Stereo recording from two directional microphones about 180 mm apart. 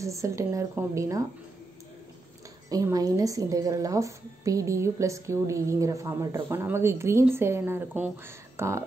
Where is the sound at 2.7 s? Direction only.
20° right (ahead or behind).